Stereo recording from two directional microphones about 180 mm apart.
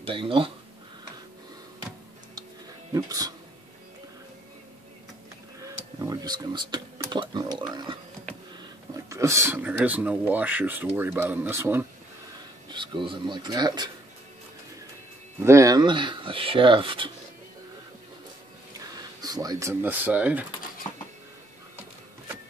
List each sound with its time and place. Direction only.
0.0 s speech: 30° right (ahead or behind)
2.9 s a sound: 20° right (ahead or behind)
5.6 s a sound: 20° right (ahead or behind)
8.9 s speech: 15° right (ahead or behind)
12.6 s speech: 25° right (ahead or behind)
15.4 s speech: 15° right (ahead or behind)
18.9 s speech: 20° right (ahead or behind)